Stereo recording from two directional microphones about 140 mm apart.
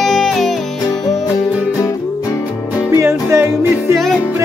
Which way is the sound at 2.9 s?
20° right (ahead or behind).